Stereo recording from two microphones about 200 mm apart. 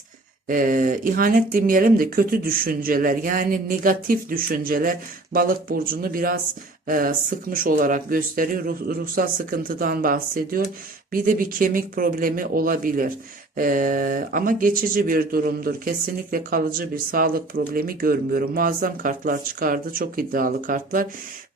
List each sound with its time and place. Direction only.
0.4 s speech: 45° right (ahead or behind)